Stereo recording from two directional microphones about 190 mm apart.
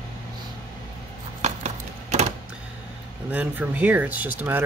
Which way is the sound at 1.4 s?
35° right (ahead or behind).